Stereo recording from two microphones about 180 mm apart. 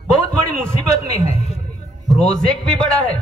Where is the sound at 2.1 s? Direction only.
5° left (ahead or behind).